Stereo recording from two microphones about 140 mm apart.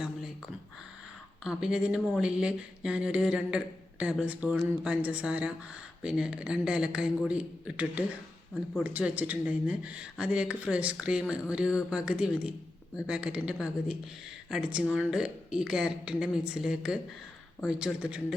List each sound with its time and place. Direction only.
1.5 s a woman's voice: 5° right (ahead or behind)
4.5 s a woman's voice: centre (ahead or behind)
4.9 s a woman's voice: 10° right (ahead or behind)